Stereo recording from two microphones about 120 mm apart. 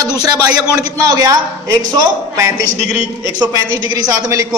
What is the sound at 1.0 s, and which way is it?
A man's voice, 30° right (ahead or behind).